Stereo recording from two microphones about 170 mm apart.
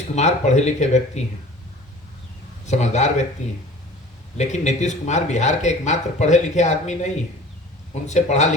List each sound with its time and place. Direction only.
0.2 s speech: 40° left (ahead or behind)
2.6 s speech: 40° left (ahead or behind)